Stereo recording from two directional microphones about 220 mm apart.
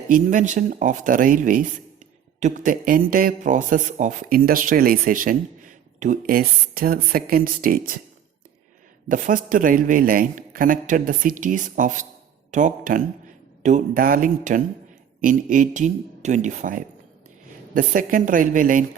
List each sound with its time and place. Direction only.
0.1 s speech: 35° right (ahead or behind)
9.0 s speech: 35° right (ahead or behind)